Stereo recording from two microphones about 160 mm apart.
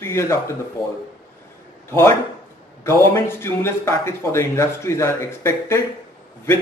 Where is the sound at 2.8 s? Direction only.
15° left (ahead or behind).